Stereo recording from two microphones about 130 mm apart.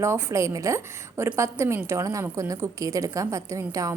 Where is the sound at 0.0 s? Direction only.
20° right (ahead or behind).